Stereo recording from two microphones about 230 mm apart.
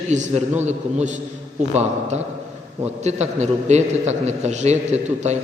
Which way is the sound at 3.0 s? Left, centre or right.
Right.